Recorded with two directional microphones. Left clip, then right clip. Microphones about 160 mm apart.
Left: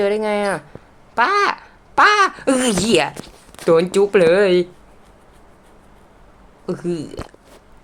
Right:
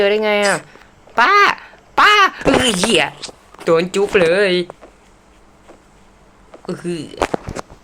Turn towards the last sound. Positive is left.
turn(degrees=10)  # may be behind; listen again after turning